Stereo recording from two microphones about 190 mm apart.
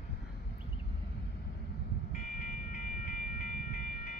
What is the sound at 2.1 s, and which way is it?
Train, 40° left (ahead or behind).